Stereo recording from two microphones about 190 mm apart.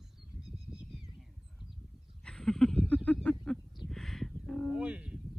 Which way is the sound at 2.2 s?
5° left (ahead or behind).